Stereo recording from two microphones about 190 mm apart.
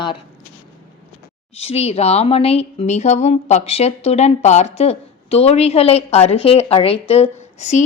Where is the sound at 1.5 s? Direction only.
30° left (ahead or behind).